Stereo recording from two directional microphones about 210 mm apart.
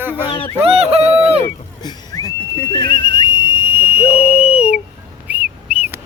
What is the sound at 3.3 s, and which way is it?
Whistle, 10° right (ahead or behind).